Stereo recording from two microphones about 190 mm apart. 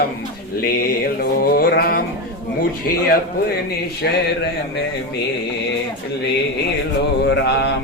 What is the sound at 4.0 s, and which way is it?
Mantra, 60° left (ahead or behind).